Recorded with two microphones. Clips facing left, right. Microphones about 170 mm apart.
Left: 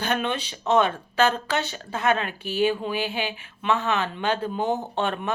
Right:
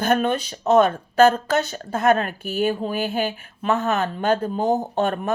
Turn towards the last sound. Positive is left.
turn(degrees=-45)  # may be behind; listen again after turning